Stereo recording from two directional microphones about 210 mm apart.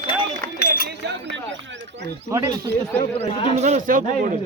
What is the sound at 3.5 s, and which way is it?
Speech, 30° right (ahead or behind).